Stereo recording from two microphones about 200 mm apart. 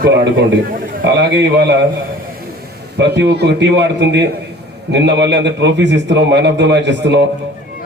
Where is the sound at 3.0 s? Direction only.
60° right (ahead or behind).